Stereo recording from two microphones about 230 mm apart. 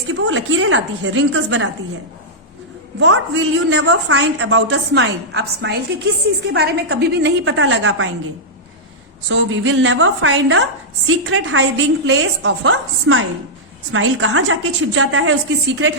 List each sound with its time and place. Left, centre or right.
0.1 s a woman's voice: right
3.0 s a woman's voice: right
9.3 s a woman's voice: right